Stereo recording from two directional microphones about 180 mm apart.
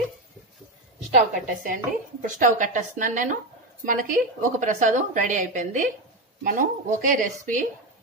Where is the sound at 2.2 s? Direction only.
45° right (ahead or behind).